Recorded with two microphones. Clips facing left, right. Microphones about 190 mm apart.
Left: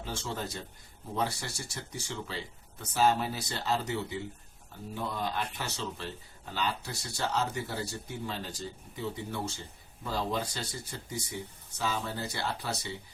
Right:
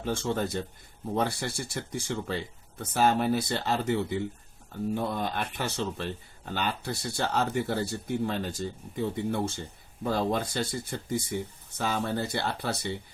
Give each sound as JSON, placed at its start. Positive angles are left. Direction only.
{"t": 0.0, "sound": "speech", "side_deg": -55}